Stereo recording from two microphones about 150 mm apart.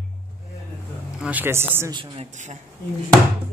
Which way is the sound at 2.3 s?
50° right (ahead or behind).